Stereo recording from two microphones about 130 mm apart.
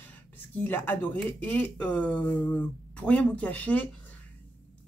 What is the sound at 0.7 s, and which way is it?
Speech, 15° left (ahead or behind).